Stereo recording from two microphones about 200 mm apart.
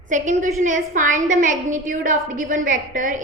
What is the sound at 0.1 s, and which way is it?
A woman's voice, 40° right (ahead or behind).